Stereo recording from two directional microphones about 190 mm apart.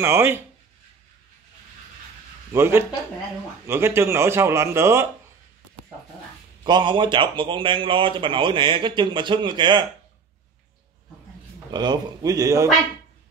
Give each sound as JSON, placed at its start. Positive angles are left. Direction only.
{"t": 0.0, "sound": "speech", "side_deg": -10}
{"t": 2.5, "sound": "speech", "side_deg": -15}
{"t": 6.6, "sound": "speech", "side_deg": -25}
{"t": 11.7, "sound": "speech", "side_deg": -20}